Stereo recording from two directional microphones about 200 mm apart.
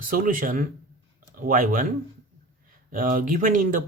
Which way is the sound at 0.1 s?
40° right (ahead or behind).